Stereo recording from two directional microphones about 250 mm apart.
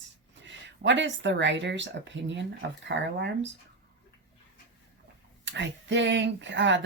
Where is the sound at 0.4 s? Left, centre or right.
Right.